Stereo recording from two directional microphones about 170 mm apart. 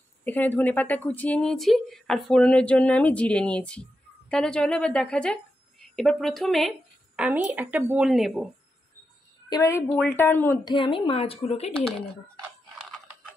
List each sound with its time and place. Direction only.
0.2 s a woman's voice: 10° left (ahead or behind)
9.5 s a woman's voice: 15° left (ahead or behind)
10.6 s a woman's voice: 30° left (ahead or behind)